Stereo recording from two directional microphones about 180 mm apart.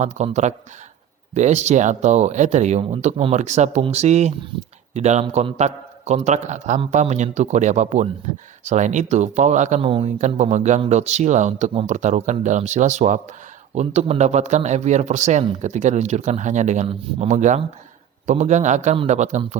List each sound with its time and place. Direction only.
0.0 s speech: 40° right (ahead or behind)